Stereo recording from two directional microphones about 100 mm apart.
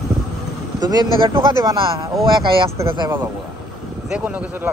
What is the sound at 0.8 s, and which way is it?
Speech, 45° right (ahead or behind).